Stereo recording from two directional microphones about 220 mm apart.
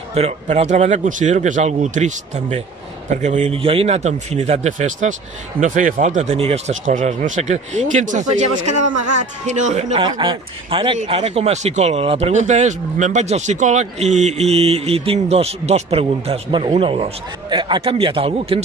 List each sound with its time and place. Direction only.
0.1 s speech: 30° right (ahead or behind)
8.5 s a man's voice: 90° right
9.5 s speech: 30° right (ahead or behind)